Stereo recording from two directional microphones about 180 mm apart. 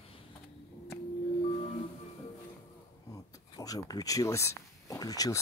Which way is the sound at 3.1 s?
20° left (ahead or behind).